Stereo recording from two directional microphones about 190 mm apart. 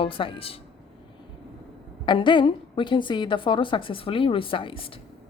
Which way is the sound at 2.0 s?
25° left (ahead or behind).